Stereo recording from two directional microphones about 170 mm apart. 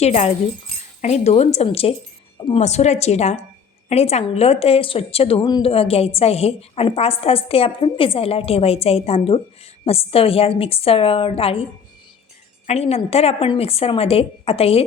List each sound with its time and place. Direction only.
0.0 s a woman's voice: 40° left (ahead or behind)